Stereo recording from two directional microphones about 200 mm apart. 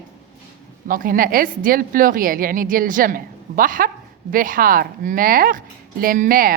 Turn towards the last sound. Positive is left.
turn(degrees=-45)  # may be behind; listen again after turning